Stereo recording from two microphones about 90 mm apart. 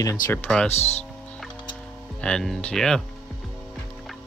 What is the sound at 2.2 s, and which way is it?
Speech, 10° left (ahead or behind).